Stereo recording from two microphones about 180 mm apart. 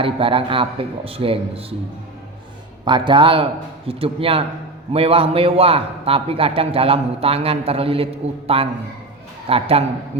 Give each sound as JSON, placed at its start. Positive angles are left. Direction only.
{"t": 0.0, "sound": "a man's voice", "side_deg": -30}
{"t": 2.8, "sound": "a man's voice", "side_deg": -25}
{"t": 9.5, "sound": "a man's voice", "side_deg": -30}